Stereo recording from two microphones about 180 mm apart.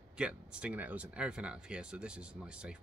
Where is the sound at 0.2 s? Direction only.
5° right (ahead or behind).